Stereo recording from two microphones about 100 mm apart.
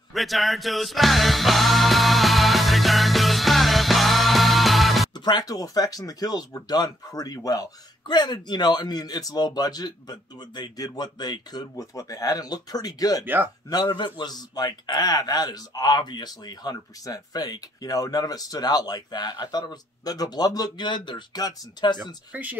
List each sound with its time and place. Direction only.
0.1 s music: centre (ahead or behind)
5.1 s a man's voice: 45° left (ahead or behind)
13.2 s speech: 20° right (ahead or behind)
13.7 s a man's voice: 40° left (ahead or behind)
22.3 s speech: 15° right (ahead or behind)